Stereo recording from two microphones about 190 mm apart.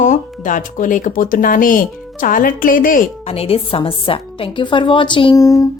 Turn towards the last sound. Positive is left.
turn(degrees=25)  # may be behind; listen again after turning